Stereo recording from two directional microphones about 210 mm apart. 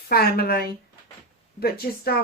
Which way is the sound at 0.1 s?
45° left (ahead or behind).